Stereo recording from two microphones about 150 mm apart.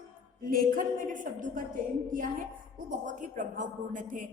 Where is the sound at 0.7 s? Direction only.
60° right (ahead or behind).